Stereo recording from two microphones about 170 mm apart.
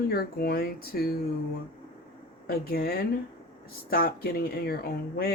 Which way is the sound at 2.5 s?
65° left (ahead or behind).